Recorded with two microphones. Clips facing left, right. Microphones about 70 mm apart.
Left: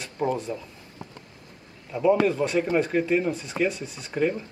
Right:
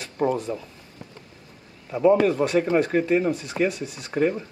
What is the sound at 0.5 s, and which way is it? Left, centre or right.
Speech, right.